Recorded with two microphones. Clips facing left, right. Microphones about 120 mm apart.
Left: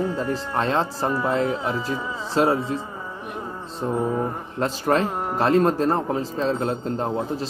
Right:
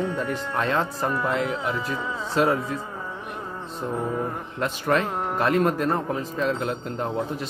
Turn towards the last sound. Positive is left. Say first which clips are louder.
# left 2 dB
turn(degrees=30)  # may be behind; listen again after turning